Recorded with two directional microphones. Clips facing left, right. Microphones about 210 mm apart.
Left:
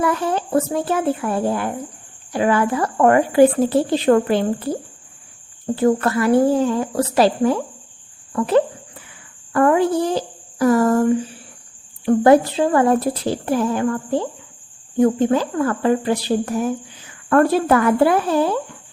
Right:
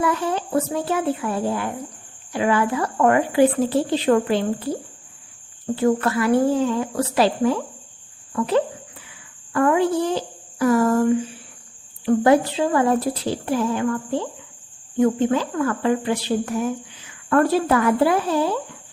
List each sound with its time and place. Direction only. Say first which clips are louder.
0.0 s speech: left 2 dB; 50° left (ahead or behind)
5.7 s a woman's voice: left 2 dB; 40° left (ahead or behind)
12.0 s a woman's voice: left 3 dB; 45° left (ahead or behind)
17.2 s speech: left 3 dB; 50° left (ahead or behind)